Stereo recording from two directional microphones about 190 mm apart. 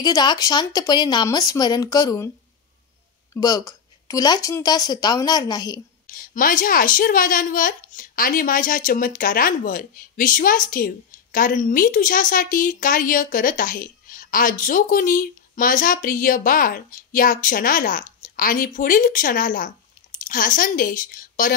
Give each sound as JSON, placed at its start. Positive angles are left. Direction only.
{"t": 0.0, "sound": "speech", "side_deg": 20}
{"t": 3.3, "sound": "speech", "side_deg": 20}
{"t": 6.0, "sound": "a child's voice", "side_deg": 45}